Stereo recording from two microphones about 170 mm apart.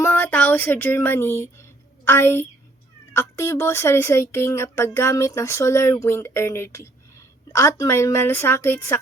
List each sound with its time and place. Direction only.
0.0 s speech: 10° left (ahead or behind)